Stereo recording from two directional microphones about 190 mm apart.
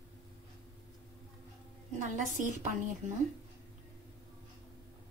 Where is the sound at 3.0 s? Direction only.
40° right (ahead or behind).